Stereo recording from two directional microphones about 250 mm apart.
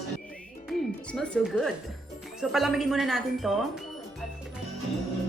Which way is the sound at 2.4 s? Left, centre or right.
Centre.